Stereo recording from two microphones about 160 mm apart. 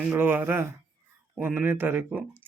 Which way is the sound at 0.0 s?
10° right (ahead or behind).